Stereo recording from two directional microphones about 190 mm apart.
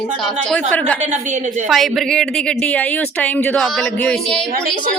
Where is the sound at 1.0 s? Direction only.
40° right (ahead or behind).